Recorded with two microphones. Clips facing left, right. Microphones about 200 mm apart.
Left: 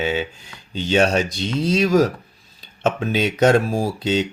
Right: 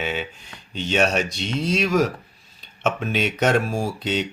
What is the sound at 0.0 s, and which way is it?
Speech, 30° left (ahead or behind).